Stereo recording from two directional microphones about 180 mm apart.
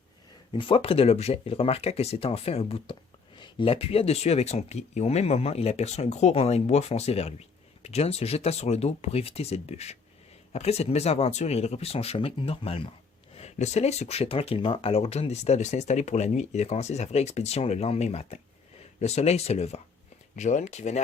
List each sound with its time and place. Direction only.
0.5 s speech: 30° left (ahead or behind)